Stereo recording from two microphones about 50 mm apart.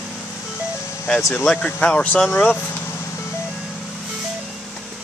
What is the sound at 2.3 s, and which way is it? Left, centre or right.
Speech, left.